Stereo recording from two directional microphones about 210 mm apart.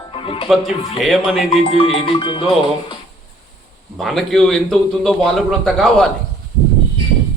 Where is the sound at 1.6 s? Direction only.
25° left (ahead or behind).